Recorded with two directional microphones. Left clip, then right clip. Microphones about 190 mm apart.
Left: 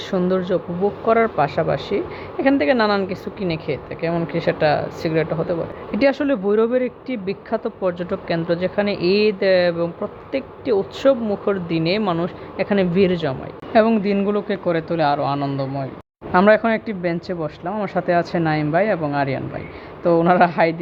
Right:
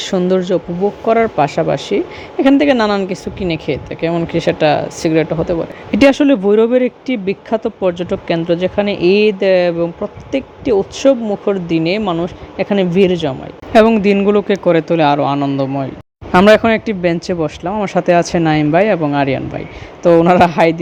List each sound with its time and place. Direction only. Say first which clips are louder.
0.0 s speech: right 6 dB; 45° right (ahead or behind)